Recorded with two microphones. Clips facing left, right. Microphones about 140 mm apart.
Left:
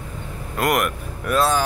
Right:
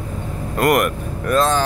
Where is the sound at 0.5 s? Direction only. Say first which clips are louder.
Right 4 dB; centre (ahead or behind).